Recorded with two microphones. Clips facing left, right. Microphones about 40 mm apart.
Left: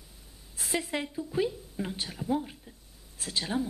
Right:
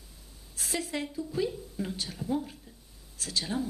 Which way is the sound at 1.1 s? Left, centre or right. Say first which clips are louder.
Left 2 dB; left.